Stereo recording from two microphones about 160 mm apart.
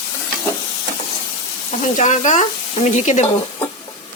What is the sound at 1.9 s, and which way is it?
Speech, 50° left (ahead or behind).